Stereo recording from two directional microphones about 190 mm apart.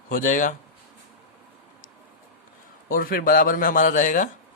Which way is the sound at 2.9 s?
50° left (ahead or behind).